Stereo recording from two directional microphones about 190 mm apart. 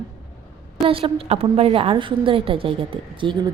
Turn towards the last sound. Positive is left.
turn(degrees=-25)  # may be behind; listen again after turning